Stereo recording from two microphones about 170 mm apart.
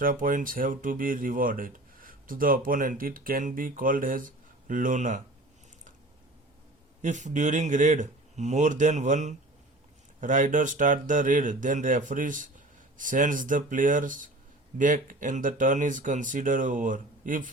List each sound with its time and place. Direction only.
0.0 s speech: 55° right (ahead or behind)
7.0 s speech: 45° right (ahead or behind)